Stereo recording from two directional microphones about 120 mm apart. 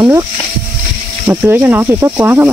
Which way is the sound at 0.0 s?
20° right (ahead or behind).